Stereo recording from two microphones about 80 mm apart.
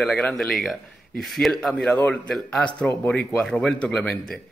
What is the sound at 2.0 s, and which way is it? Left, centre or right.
A man's voice, centre.